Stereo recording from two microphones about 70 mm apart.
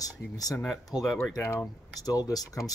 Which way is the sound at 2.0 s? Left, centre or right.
Left.